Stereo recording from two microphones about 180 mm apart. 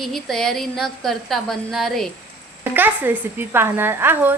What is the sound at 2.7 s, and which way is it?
A woman's voice, 10° right (ahead or behind).